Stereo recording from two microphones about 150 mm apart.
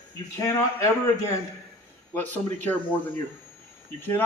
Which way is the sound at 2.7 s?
15° left (ahead or behind).